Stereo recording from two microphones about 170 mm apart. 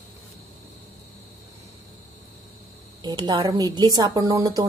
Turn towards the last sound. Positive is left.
turn(degrees=-20)  # may be behind; listen again after turning